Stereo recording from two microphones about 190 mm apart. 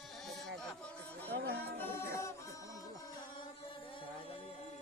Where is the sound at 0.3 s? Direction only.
Centre (ahead or behind).